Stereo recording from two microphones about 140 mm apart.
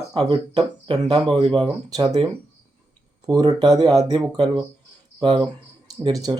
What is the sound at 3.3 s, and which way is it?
Speech, 30° right (ahead or behind).